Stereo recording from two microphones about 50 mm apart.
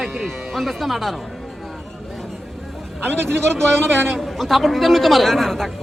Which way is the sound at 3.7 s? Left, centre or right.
Centre.